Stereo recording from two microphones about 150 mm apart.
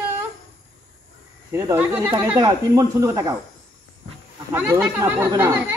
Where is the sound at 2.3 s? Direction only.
25° right (ahead or behind).